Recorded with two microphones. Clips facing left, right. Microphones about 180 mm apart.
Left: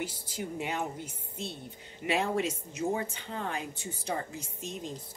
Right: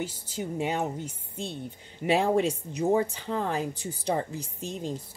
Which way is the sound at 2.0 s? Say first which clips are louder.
Right 6 dB; 35° right (ahead or behind).